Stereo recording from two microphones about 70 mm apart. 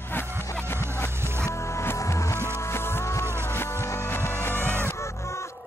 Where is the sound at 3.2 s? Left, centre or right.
Right.